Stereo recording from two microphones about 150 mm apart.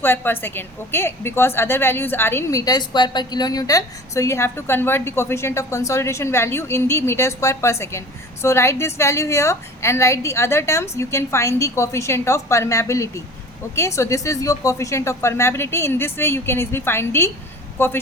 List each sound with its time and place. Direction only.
0.0 s a woman's voice: 15° left (ahead or behind)